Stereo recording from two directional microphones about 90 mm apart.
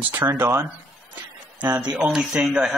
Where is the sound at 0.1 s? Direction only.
25° right (ahead or behind).